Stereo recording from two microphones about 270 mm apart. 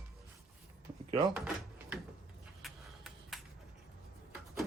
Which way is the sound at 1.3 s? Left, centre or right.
Centre.